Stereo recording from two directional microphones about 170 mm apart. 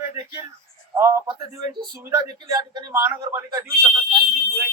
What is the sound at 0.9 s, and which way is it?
Speech, 15° right (ahead or behind).